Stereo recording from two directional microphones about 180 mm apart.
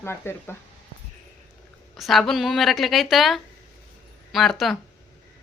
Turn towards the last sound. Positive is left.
turn(degrees=0)  # may be behind; listen again after turning